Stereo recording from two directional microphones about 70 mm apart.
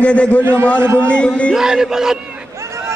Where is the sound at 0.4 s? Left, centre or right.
Right.